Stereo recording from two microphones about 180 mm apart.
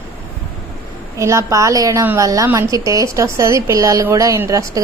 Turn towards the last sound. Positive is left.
turn(degrees=-15)  # may be behind; listen again after turning